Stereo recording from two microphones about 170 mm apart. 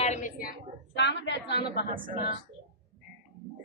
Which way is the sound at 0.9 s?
90° left.